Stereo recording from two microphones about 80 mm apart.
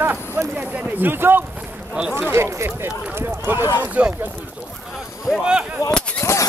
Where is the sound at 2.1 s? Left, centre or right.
Right.